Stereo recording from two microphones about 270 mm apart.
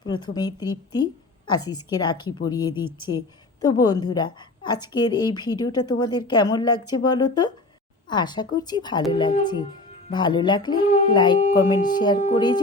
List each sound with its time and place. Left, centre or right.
0.0 s a woman's voice: centre